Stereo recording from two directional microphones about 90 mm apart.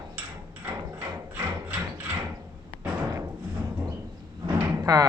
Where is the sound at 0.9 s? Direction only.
20° right (ahead or behind).